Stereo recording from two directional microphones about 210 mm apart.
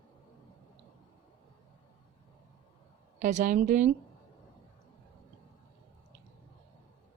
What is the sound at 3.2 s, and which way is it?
Speech, 35° right (ahead or behind).